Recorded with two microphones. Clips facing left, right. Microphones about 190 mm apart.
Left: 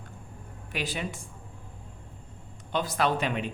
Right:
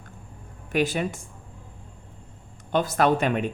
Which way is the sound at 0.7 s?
50° right (ahead or behind).